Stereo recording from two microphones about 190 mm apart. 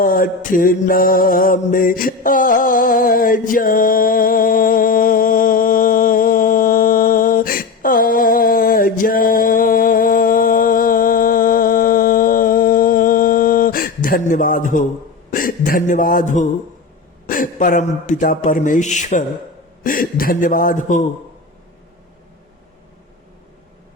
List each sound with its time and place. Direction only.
0.0 s mantra: 50° left (ahead or behind)
15.3 s a sound: 50° left (ahead or behind)
17.2 s speech: 45° left (ahead or behind)